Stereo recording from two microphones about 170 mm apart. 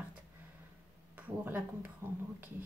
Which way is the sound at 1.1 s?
10° right (ahead or behind).